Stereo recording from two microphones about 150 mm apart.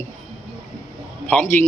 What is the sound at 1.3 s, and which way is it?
Speech, 10° left (ahead or behind).